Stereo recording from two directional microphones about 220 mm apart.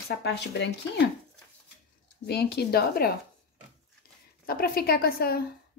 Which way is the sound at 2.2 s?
45° left (ahead or behind).